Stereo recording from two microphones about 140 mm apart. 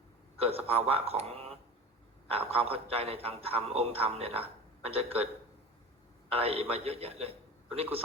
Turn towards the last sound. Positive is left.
turn(degrees=-45)  # may be behind; listen again after turning